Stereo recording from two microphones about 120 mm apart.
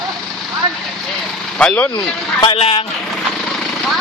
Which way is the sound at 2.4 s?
50° left (ahead or behind).